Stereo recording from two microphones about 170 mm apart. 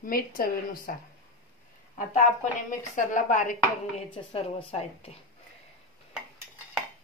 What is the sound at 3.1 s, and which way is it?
Speech, 50° left (ahead or behind).